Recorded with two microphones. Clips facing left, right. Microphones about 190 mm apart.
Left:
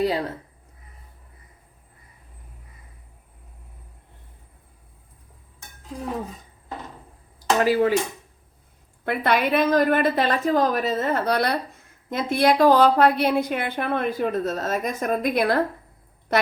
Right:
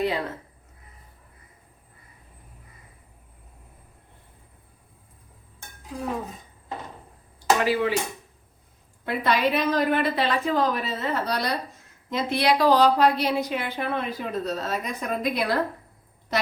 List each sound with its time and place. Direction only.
0.0 s speech: 35° left (ahead or behind)
7.6 s a woman's voice: 45° left (ahead or behind)
9.0 s a woman's voice: 60° left (ahead or behind)